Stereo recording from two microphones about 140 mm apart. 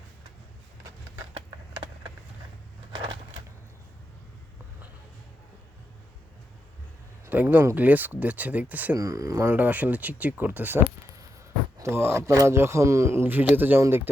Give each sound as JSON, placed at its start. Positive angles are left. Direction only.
{"t": 1.3, "sound": "a sound", "side_deg": -40}
{"t": 2.9, "sound": "a sound", "side_deg": -35}
{"t": 7.3, "sound": "speech", "side_deg": -15}
{"t": 9.0, "sound": "speech", "side_deg": -25}
{"t": 9.5, "sound": "speech", "side_deg": -10}
{"t": 11.8, "sound": "speech", "side_deg": -15}